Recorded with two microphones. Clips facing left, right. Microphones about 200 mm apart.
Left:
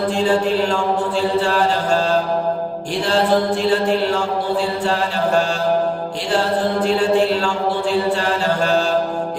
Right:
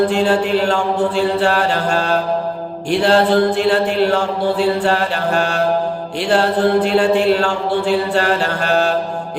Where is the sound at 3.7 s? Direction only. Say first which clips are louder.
Right 2 dB; 65° right (ahead or behind).